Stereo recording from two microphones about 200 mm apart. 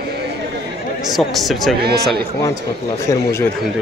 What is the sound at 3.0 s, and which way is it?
Speech, 15° left (ahead or behind).